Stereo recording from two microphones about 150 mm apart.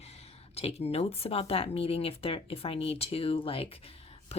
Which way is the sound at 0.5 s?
45° left (ahead or behind).